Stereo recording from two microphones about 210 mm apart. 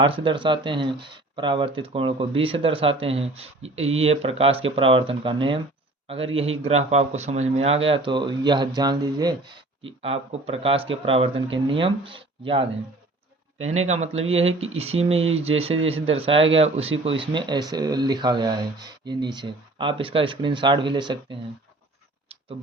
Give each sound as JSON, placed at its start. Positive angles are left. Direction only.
{"t": 0.2, "sound": "speech", "side_deg": -25}
{"t": 13.7, "sound": "speech", "side_deg": -30}